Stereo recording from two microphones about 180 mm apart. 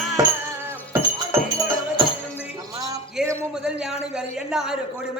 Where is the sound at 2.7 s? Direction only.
20° right (ahead or behind).